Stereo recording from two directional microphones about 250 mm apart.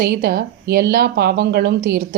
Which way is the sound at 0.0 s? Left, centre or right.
Right.